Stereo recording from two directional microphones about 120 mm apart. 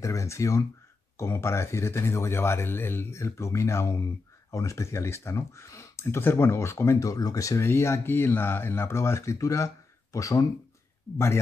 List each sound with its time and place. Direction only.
0.0 s speech: 25° left (ahead or behind)